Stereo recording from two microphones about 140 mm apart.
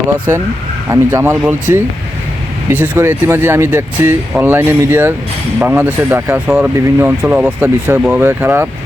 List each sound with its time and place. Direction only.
0.9 s speech: 15° right (ahead or behind)
2.7 s speech: 15° right (ahead or behind)